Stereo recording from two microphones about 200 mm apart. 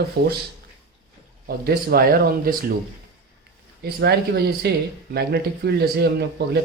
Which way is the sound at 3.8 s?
50° right (ahead or behind).